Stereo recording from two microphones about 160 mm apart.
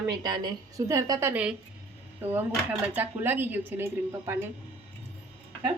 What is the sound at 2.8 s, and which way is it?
A woman's voice, 10° right (ahead or behind).